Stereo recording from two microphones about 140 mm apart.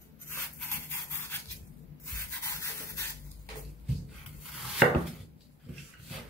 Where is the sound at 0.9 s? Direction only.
15° left (ahead or behind).